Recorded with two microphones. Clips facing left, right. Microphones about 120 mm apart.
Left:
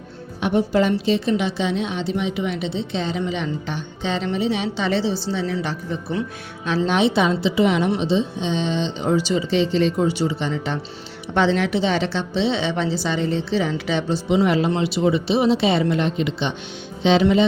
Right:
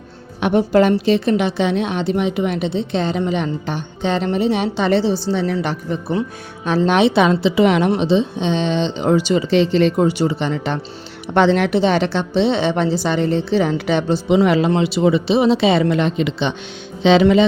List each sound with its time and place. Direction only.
0.3 s a woman's voice: 70° right (ahead or behind); by 17.4 s 90° right